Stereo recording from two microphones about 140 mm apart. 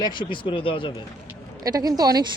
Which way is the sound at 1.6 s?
25° right (ahead or behind).